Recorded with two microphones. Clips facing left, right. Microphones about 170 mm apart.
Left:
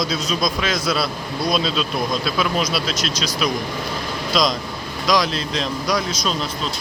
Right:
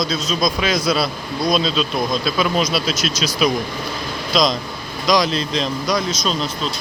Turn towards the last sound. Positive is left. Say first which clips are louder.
# right 1 dB
turn(degrees=5)  # may be behind; listen again after turning